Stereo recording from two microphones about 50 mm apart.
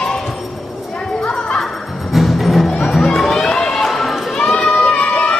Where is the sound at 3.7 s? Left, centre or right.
Centre.